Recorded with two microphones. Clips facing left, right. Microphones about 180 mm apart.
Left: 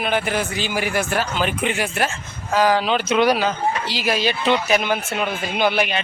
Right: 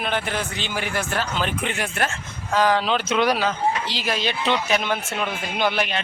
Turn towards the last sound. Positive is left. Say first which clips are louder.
# left 3 dB
turn(degrees=5)  # may be behind; listen again after turning